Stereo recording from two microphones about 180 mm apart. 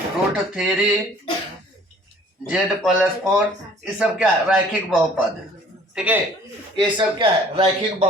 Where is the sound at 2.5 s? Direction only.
5° right (ahead or behind).